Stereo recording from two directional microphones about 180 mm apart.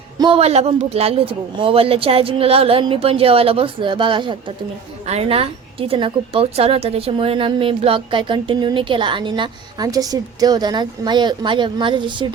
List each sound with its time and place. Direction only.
0.2 s a woman's voice: 30° right (ahead or behind)